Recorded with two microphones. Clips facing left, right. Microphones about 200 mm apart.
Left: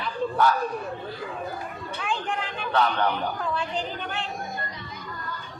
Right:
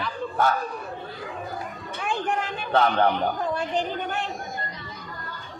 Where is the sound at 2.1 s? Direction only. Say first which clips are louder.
Right 3 dB; 45° right (ahead or behind).